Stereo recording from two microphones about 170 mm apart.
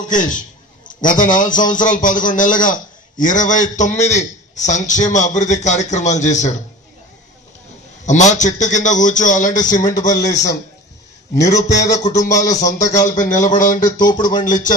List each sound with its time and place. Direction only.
0.1 s a man's voice: 50° left (ahead or behind)
8.0 s a man's voice: 45° left (ahead or behind)
10.0 s speech: 20° left (ahead or behind)
11.9 s a man's voice: 45° left (ahead or behind)
12.8 s speech: 20° left (ahead or behind)
13.1 s a man's voice: 50° left (ahead or behind)
13.8 s speech: 25° left (ahead or behind)
14.2 s a man's voice: 50° left (ahead or behind)